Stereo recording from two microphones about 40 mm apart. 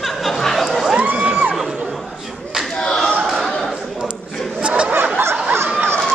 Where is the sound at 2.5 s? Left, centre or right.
Centre.